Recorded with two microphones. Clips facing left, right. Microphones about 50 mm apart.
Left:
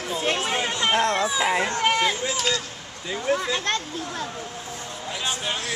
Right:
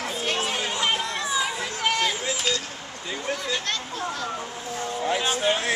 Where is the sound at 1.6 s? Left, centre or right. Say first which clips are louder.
Left 6 dB; left.